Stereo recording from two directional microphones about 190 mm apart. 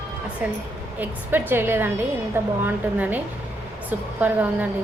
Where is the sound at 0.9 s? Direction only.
10° right (ahead or behind).